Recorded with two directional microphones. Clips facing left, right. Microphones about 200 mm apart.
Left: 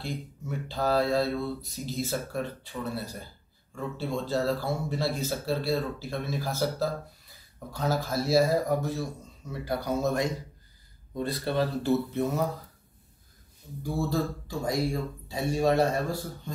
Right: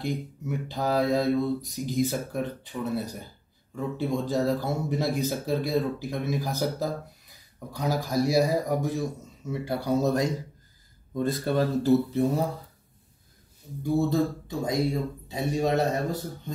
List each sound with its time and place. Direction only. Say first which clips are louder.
0.0 s speech: right 5 dB; 15° right (ahead or behind)
9.5 s speech: right 3 dB; 30° right (ahead or behind)
13.9 s a man's voice: right 5 dB; 20° right (ahead or behind)